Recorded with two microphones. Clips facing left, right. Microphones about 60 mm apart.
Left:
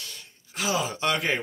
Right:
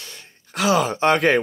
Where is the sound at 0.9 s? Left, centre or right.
Right.